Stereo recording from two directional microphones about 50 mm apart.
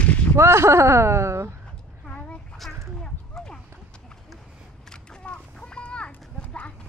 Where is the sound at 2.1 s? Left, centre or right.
Left.